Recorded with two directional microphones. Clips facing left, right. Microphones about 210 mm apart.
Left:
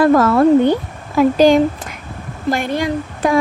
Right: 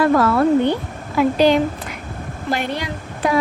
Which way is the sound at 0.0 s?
45° left (ahead or behind).